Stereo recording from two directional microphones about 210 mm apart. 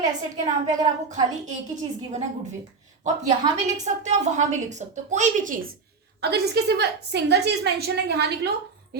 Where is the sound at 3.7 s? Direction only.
35° right (ahead or behind).